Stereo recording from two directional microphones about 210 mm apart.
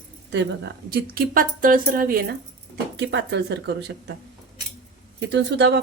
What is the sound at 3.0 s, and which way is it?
Speech, 55° right (ahead or behind).